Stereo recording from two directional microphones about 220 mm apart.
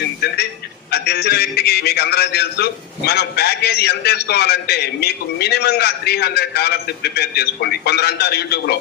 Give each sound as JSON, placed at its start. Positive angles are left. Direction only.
{"t": 0.9, "sound": "a man's voice", "side_deg": 45}